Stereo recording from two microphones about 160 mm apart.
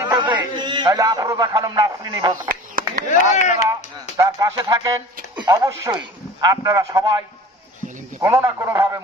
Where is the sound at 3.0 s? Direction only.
50° left (ahead or behind).